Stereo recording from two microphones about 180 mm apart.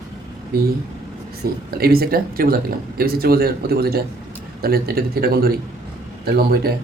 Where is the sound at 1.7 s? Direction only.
55° right (ahead or behind).